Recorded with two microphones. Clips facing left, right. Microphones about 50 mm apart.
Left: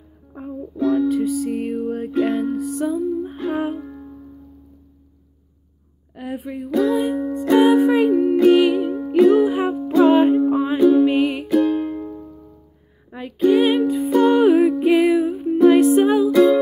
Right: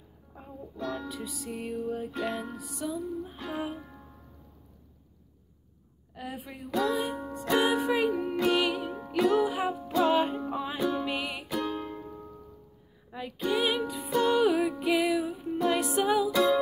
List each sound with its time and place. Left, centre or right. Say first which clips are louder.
0.3 s music: left 14 dB; left
2.9 s music: left 12 dB; left
3.7 s music: left 12 dB; centre
6.1 s music: left 11 dB; centre